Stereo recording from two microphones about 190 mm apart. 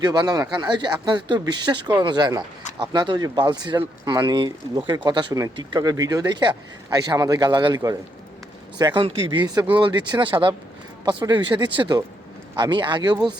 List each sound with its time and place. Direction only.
0.0 s speech: 20° right (ahead or behind)